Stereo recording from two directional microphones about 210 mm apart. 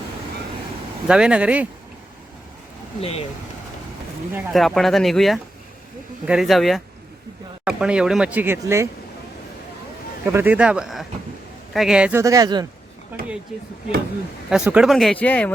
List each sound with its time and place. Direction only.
1.0 s speech: 5° right (ahead or behind)
3.0 s speech: 30° left (ahead or behind)
4.4 s speech: centre (ahead or behind)
10.2 s speech: 10° right (ahead or behind)
12.2 s speech: 15° right (ahead or behind)
13.1 s a sound: 10° right (ahead or behind)
14.5 s speech: 5° right (ahead or behind)